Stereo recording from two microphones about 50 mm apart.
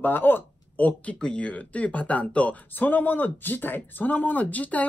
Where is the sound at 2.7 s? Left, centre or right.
Left.